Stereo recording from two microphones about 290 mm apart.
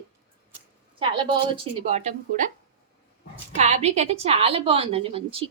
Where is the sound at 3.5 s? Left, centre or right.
Right.